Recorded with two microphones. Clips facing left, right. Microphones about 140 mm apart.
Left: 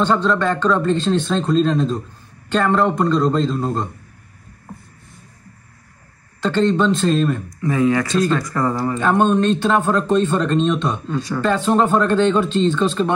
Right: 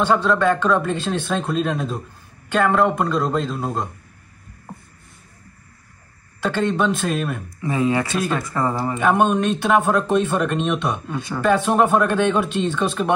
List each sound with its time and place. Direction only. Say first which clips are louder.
0.0 s speech: even; 5° right (ahead or behind)
6.4 s speech: left 4 dB; 10° right (ahead or behind)
7.4 s speech: left 3 dB; 25° right (ahead or behind)
8.1 s speech: left 5 dB; 10° right (ahead or behind)
8.4 s speech: left 2 dB; 25° right (ahead or behind)